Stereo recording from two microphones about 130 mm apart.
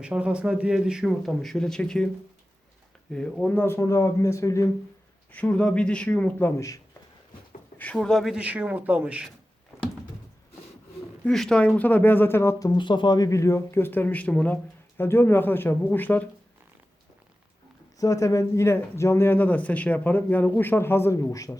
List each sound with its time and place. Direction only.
0.0 s speech: 5° right (ahead or behind)
3.1 s speech: 5° left (ahead or behind); by 4.7 s 25° left (ahead or behind)
5.3 s speech: 10° left (ahead or behind)
7.8 s speech: 10° left (ahead or behind); by 9.3 s 5° right (ahead or behind)
11.3 s speech: 5° left (ahead or behind)
18.0 s speech: 25° left (ahead or behind)